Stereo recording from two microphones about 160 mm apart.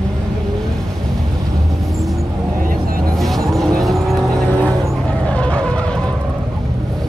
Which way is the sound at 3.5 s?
Centre (ahead or behind).